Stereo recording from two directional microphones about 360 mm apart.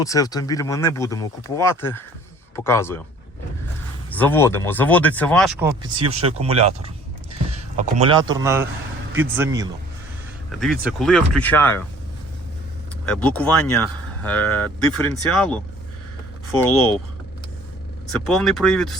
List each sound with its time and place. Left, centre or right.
0.0 s speech: centre
4.1 s speech: centre
6.1 s speech: centre
13.1 s speech: centre
18.3 s speech: centre